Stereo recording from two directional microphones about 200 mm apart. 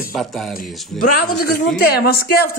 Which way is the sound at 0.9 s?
45° left (ahead or behind).